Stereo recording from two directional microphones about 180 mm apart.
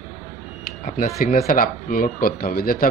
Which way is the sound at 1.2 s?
55° left (ahead or behind).